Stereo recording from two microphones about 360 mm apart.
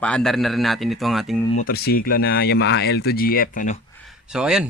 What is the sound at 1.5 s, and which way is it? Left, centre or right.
Speech, left.